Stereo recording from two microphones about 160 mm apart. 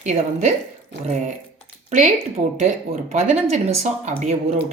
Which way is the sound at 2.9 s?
40° right (ahead or behind).